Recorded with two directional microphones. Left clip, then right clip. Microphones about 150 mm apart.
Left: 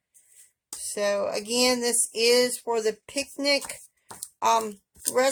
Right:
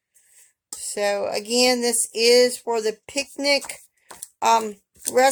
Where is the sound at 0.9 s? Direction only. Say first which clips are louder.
Right 3 dB; 40° right (ahead or behind).